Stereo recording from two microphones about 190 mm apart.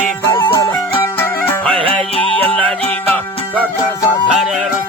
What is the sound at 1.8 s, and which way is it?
Music, 30° right (ahead or behind).